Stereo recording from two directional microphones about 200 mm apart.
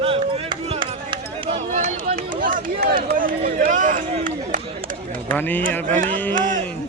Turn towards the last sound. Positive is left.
turn(degrees=-40)  # may be behind; listen again after turning